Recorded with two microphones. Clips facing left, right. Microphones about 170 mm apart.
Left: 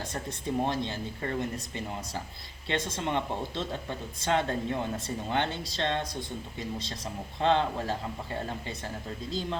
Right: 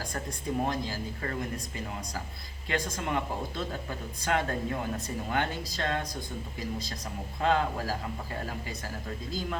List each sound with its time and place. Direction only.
0.1 s speech: 25° left (ahead or behind)